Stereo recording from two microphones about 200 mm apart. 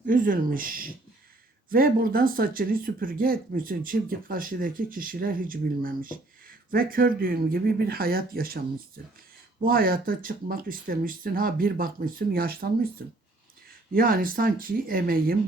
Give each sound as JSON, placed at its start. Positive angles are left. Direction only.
{"t": 0.0, "sound": "speech", "side_deg": -40}
{"t": 9.6, "sound": "speech", "side_deg": -45}
{"t": 13.9, "sound": "speech", "side_deg": -45}